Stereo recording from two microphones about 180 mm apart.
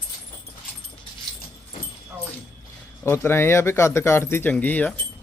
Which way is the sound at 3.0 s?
15° left (ahead or behind).